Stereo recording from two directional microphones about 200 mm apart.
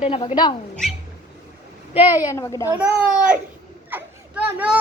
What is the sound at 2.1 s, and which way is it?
Speech, 15° left (ahead or behind).